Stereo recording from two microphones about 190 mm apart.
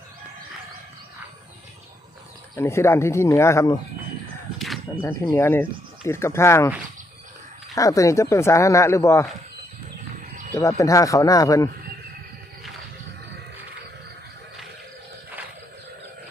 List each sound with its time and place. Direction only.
2.6 s speech: 15° left (ahead or behind)
4.5 s a sound: centre (ahead or behind)
5.0 s speech: 15° left (ahead or behind)
7.8 s speech: 15° left (ahead or behind)
10.5 s speech: 15° left (ahead or behind)